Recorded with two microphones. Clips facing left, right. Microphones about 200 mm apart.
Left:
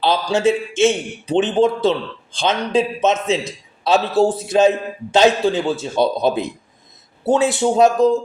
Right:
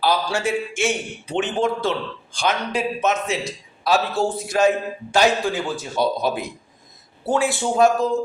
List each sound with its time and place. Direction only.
0.0 s a man's voice: 25° left (ahead or behind)